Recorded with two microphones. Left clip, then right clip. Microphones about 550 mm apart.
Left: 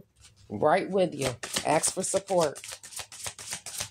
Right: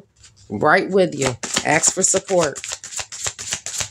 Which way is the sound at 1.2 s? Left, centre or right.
Left.